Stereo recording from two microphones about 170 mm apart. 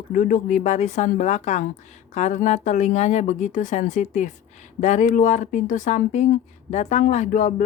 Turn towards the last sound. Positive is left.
turn(degrees=45)  # may be behind; listen again after turning